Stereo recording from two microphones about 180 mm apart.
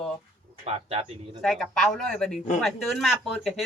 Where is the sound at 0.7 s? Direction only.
35° right (ahead or behind).